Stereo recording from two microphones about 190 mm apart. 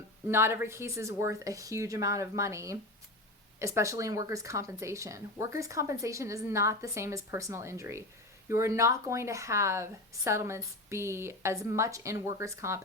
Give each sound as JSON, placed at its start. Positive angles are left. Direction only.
{"t": 0.3, "sound": "speech", "side_deg": -10}